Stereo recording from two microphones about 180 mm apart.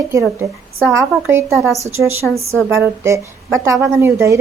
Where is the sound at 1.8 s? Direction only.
15° right (ahead or behind).